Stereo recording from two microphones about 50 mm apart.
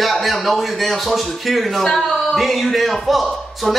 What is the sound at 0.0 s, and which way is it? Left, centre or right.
A woman's voice, centre.